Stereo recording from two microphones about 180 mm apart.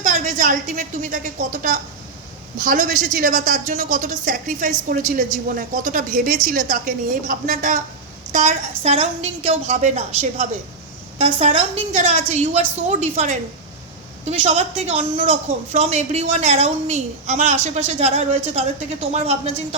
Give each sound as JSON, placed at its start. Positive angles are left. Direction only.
{"t": 0.0, "sound": "a woman's voice", "side_deg": -45}